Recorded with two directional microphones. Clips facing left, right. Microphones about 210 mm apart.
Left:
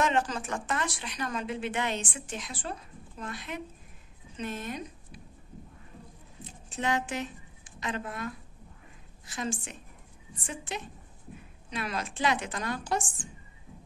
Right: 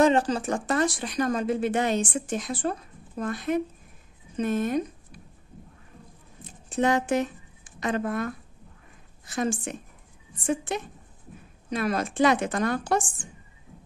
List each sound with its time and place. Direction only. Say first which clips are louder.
0.0 s a woman's voice: right 7 dB; 35° right (ahead or behind)
6.7 s a woman's voice: right 8 dB; 50° right (ahead or behind)